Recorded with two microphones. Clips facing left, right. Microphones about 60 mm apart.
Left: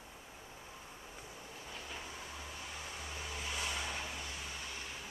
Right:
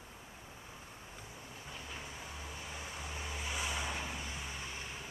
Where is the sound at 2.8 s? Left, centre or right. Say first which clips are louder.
Right 2 dB; centre.